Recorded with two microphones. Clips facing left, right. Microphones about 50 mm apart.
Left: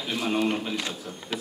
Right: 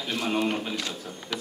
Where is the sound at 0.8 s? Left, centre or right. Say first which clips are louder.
Left 1 dB; centre.